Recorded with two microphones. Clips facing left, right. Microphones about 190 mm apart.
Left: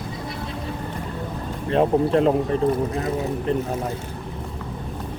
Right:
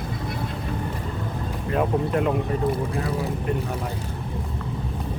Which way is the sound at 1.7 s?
30° left (ahead or behind).